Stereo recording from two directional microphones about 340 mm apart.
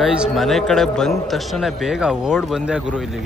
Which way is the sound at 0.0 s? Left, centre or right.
Centre.